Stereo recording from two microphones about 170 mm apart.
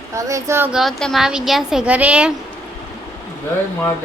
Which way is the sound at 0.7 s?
Centre (ahead or behind).